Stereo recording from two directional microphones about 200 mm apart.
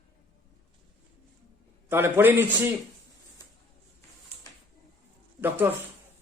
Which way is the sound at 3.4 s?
20° left (ahead or behind).